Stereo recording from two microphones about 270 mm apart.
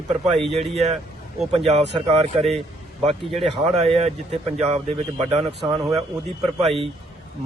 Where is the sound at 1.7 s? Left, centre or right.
Right.